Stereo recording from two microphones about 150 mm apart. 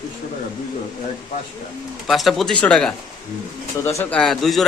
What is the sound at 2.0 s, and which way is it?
A man's voice, centre (ahead or behind).